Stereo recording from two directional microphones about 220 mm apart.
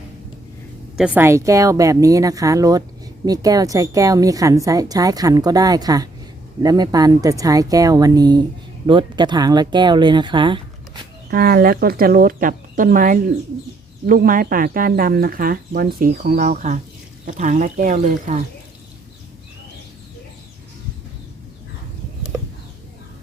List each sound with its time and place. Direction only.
0.9 s a woman's voice: 5° right (ahead or behind); by 11.0 s 20° right (ahead or behind)
11.3 s speech: 40° right (ahead or behind)